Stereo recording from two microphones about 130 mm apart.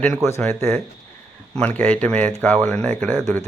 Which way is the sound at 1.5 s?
10° left (ahead or behind).